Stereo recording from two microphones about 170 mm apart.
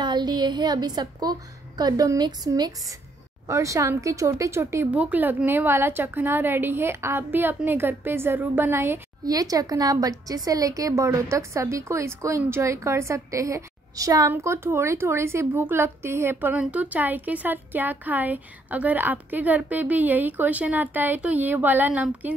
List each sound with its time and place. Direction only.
0.0 s a woman's voice: 25° right (ahead or behind); by 22.3 s 10° right (ahead or behind)